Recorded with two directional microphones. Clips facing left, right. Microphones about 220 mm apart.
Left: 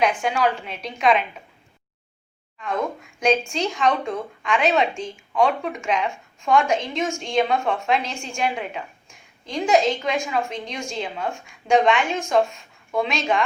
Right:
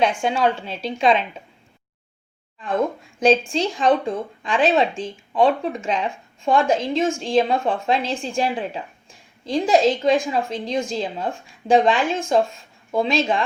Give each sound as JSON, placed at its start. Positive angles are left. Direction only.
{"t": 0.0, "sound": "a woman's voice", "side_deg": -30}
{"t": 2.6, "sound": "a woman's voice", "side_deg": -30}